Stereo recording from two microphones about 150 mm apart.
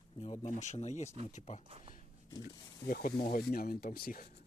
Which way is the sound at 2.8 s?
75° left (ahead or behind).